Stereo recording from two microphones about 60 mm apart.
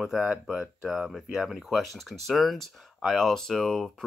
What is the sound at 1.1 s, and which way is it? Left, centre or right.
Speech, centre.